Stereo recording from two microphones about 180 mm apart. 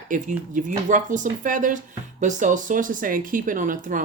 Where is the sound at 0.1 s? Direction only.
45° right (ahead or behind).